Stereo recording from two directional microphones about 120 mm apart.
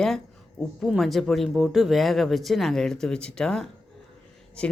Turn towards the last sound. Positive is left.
turn(degrees=10)  # may be behind; listen again after turning